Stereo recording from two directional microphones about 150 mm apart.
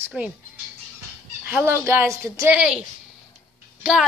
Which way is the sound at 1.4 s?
15° right (ahead or behind).